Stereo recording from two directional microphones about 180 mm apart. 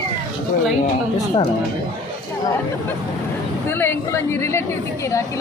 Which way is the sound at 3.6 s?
10° left (ahead or behind).